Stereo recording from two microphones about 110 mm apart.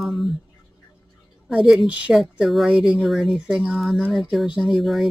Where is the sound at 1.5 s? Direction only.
5° right (ahead or behind).